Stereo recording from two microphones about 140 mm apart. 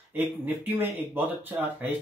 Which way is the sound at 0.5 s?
15° right (ahead or behind).